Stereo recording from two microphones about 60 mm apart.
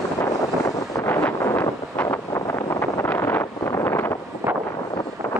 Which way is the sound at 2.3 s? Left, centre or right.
Left.